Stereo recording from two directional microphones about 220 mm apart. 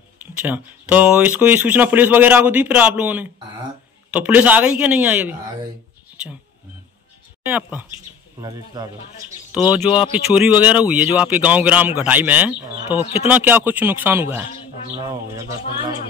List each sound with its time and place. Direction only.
0.2 s speech: 10° right (ahead or behind)
7.4 s speech: 5° right (ahead or behind)
8.4 s speech: 15° right (ahead or behind)
9.8 s speech: 25° left (ahead or behind)
10.1 s speech: 5° right (ahead or behind)